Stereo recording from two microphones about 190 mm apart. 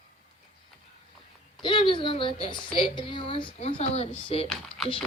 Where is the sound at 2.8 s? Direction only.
25° left (ahead or behind).